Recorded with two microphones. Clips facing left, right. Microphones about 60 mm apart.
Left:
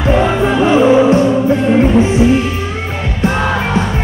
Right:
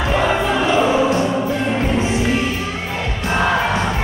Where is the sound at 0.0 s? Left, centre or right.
Left.